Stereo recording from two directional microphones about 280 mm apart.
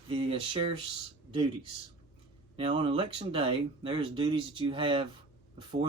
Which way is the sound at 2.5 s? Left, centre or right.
Centre.